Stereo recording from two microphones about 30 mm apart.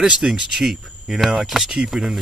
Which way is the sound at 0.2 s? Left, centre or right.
Centre.